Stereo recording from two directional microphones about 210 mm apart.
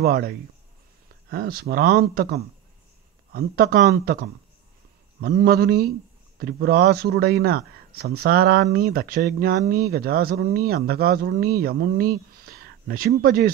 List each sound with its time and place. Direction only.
0.0 s speech: 45° right (ahead or behind)
5.2 s speech: 45° right (ahead or behind)